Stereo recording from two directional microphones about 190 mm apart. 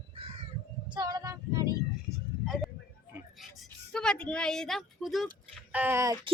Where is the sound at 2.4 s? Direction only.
Centre (ahead or behind).